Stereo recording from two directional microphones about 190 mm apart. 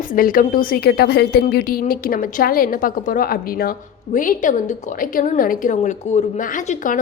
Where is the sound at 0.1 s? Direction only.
45° left (ahead or behind).